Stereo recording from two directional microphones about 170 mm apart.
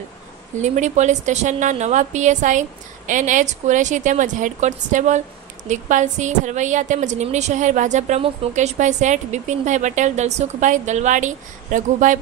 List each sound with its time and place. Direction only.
0.6 s a woman's voice: 45° right (ahead or behind)